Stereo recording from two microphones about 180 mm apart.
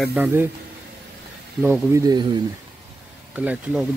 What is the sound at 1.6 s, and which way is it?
Speech, 15° right (ahead or behind).